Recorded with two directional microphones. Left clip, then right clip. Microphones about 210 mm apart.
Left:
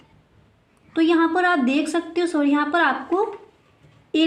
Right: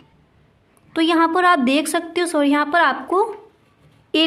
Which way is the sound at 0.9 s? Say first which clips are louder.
Right 2 dB; 35° right (ahead or behind).